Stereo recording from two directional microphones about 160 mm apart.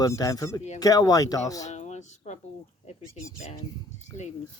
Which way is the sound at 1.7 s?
45° left (ahead or behind).